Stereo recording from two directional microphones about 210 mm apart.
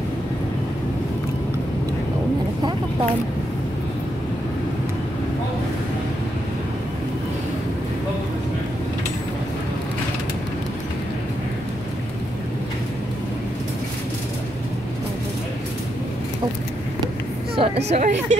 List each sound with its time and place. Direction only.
17.6 s speech: 30° right (ahead or behind)